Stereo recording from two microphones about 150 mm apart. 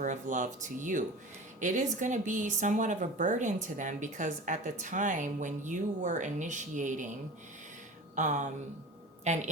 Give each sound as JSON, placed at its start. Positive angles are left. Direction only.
{"t": 0.0, "sound": "speech", "side_deg": -60}
{"t": 8.1, "sound": "a woman's voice", "side_deg": -55}